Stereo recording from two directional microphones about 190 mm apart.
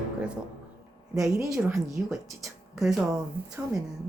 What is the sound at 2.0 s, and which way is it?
Speech, 10° right (ahead or behind).